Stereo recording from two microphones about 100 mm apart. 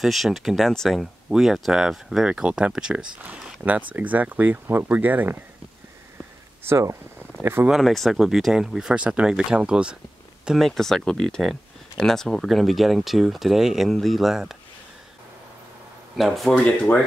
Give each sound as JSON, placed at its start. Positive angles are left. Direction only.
{"t": 0.0, "sound": "speech", "side_deg": 0}
{"t": 6.6, "sound": "speech", "side_deg": -25}
{"t": 7.6, "sound": "speech", "side_deg": 0}
{"t": 16.2, "sound": "speech", "side_deg": 0}